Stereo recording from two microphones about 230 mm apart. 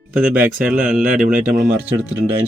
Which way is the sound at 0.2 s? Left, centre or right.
Right.